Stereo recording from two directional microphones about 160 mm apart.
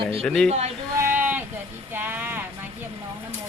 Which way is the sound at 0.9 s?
15° right (ahead or behind).